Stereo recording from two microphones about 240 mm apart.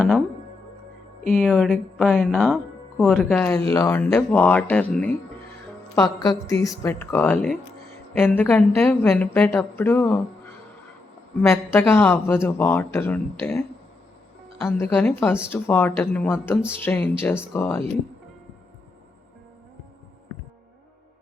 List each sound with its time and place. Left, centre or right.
1.4 s speech: centre
11.3 s speech: centre